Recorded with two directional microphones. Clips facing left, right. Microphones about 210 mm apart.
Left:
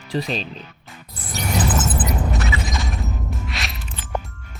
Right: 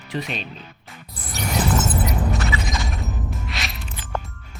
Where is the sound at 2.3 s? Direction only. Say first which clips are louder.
Even; centre (ahead or behind).